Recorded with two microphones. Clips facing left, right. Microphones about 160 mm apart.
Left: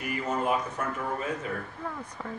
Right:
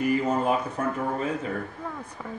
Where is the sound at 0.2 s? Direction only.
30° right (ahead or behind).